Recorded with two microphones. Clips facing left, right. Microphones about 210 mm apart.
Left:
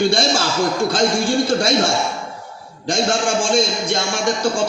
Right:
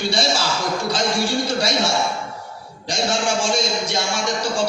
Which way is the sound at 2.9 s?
50° left (ahead or behind).